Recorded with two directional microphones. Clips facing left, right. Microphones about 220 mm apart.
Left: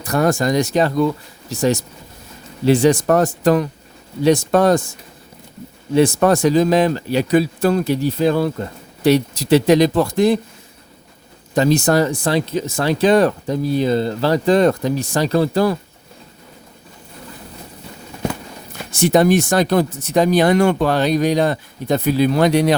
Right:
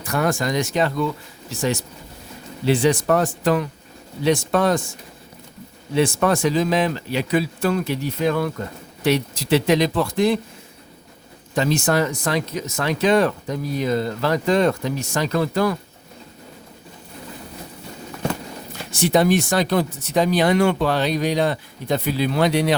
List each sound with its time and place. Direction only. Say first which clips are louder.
0.0 s speech: left 5 dB; 40° left (ahead or behind)
5.9 s speech: left 5 dB; 40° left (ahead or behind)
11.5 s speech: left 5 dB; 40° left (ahead or behind)
18.9 s speech: left 4 dB; 50° left (ahead or behind)